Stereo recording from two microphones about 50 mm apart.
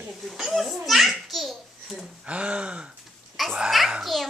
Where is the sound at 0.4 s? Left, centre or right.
Centre.